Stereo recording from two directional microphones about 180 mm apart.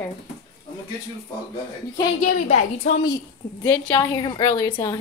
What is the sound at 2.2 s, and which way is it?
Speech, 40° left (ahead or behind).